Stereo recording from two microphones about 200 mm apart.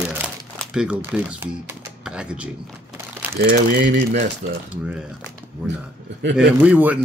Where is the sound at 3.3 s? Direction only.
50° right (ahead or behind).